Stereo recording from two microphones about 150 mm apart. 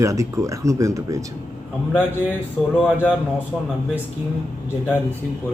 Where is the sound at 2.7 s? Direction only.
5° left (ahead or behind).